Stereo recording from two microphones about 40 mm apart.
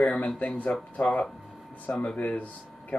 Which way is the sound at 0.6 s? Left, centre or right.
Left.